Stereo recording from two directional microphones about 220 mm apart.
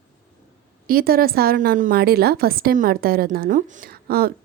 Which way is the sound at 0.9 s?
40° right (ahead or behind).